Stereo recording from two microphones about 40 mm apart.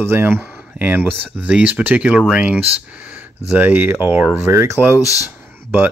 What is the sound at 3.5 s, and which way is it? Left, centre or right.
Speech, right.